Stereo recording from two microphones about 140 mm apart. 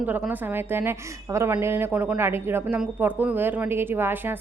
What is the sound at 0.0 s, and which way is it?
A woman's voice, 10° right (ahead or behind).